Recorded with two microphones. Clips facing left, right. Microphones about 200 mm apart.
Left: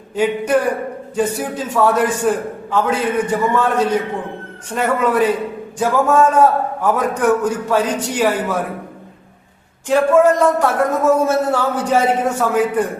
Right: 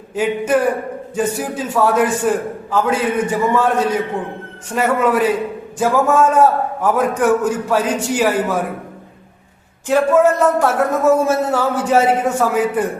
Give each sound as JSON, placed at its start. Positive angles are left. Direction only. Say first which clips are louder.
{"t": 0.2, "sound": "a man's voice", "louder": "even", "side_deg": -5}
{"t": 9.8, "sound": "a man's voice", "louder": "left 1 dB", "side_deg": -5}